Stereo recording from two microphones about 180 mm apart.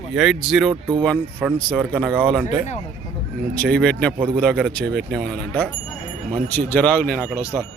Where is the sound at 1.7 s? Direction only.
Centre (ahead or behind).